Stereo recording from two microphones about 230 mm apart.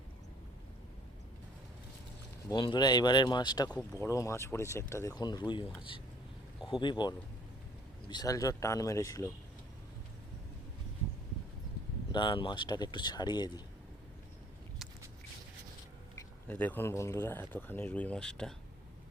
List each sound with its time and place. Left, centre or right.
2.5 s speech: centre
6.7 s speech: left
12.1 s speech: left
16.1 s speech: centre